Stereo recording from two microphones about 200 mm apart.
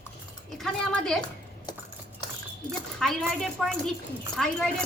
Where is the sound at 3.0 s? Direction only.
Centre (ahead or behind).